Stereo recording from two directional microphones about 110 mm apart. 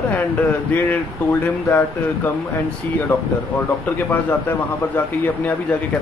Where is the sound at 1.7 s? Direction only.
15° left (ahead or behind).